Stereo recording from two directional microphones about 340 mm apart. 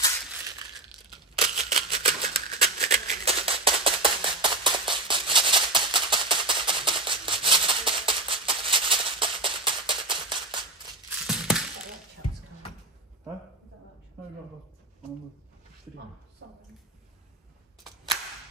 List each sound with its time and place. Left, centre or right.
1.4 s a sound: centre
1.9 s music: centre
11.2 s crushing: centre